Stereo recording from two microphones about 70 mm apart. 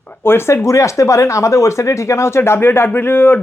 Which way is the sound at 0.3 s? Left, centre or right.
Left.